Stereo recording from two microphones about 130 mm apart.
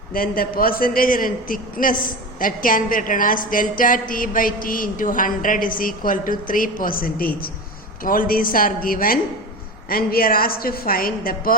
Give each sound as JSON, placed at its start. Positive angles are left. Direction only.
{"t": 0.1, "sound": "a man's voice", "side_deg": 90}